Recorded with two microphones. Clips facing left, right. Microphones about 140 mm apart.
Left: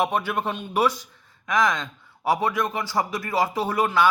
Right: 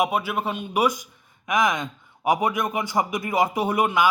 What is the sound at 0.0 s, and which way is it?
A man's voice, 10° right (ahead or behind).